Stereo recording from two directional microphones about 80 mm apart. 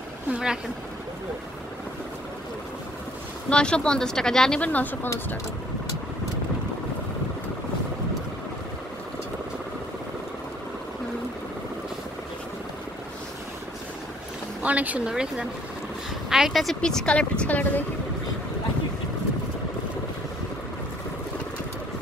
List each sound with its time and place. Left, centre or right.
0.3 s speech: centre
3.4 s speech: centre
14.6 s speech: centre; by 17.8 s left